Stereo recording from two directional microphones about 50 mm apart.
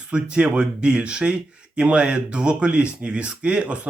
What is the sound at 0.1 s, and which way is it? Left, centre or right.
Speech, centre.